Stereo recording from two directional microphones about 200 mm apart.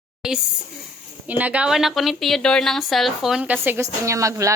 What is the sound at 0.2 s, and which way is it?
A woman's voice, 5° right (ahead or behind).